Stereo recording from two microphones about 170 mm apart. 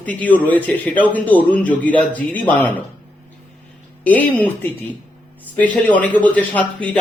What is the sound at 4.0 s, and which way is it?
Speech, 10° left (ahead or behind).